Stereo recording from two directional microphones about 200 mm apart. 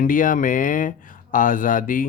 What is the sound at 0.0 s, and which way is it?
Speech, 40° left (ahead or behind).